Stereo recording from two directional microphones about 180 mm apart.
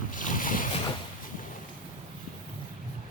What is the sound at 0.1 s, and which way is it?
Boat, 50° left (ahead or behind).